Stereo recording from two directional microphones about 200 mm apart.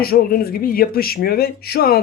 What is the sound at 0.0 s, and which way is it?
Speech, 50° left (ahead or behind).